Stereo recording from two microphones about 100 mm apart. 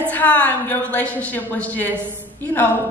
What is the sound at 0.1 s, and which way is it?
A man's voice, 15° left (ahead or behind).